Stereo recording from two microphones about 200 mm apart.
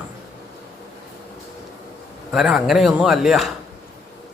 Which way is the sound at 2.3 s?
Centre (ahead or behind).